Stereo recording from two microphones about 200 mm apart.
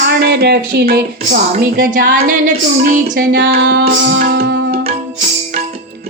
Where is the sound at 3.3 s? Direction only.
60° right (ahead or behind).